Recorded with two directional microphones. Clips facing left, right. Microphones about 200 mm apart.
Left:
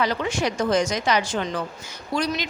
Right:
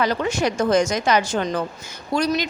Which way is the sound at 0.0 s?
45° right (ahead or behind).